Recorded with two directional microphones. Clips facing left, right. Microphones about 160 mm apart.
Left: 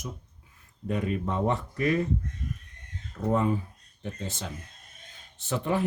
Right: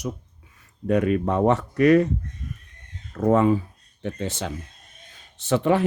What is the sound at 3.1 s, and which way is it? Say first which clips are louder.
Speech: right 8 dB; 90° right.